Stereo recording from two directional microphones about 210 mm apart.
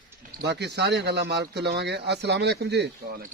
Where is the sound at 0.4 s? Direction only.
55° right (ahead or behind).